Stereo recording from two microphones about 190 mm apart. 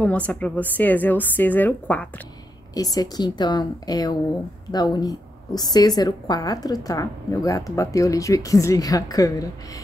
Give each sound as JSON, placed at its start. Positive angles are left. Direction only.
{"t": 0.0, "sound": "a woman's voice", "side_deg": 5}
{"t": 2.7, "sound": "a woman's voice", "side_deg": 20}